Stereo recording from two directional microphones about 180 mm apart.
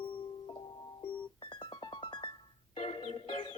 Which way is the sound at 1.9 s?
30° left (ahead or behind).